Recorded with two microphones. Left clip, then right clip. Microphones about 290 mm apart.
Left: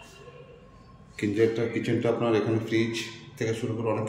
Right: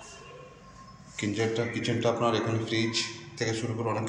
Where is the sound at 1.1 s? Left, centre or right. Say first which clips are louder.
Left 4 dB; centre.